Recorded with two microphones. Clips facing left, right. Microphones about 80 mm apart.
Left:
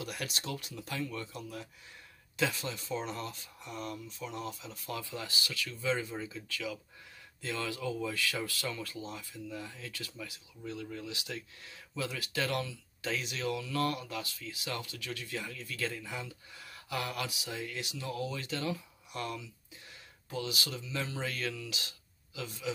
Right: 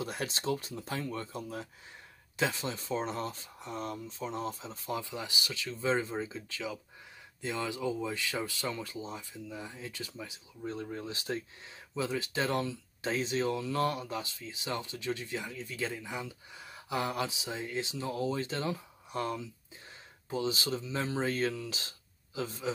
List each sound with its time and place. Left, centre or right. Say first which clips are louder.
0.0 s speech: right 4 dB; right